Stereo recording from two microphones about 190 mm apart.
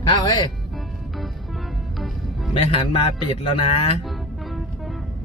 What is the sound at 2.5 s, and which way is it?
Speech, 30° left (ahead or behind).